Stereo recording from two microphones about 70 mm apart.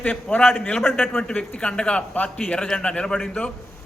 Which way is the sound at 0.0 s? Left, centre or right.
Centre.